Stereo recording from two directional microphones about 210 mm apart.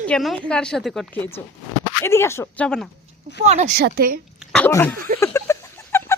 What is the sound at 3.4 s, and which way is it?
Speech, 30° right (ahead or behind).